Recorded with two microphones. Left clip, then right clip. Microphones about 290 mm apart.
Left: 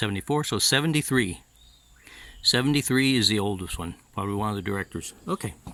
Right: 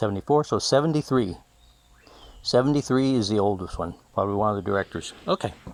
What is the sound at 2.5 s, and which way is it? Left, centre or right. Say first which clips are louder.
Speech: right 3 dB; left.